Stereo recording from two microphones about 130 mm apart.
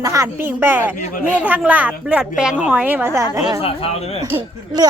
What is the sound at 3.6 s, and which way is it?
Speech, 45° left (ahead or behind).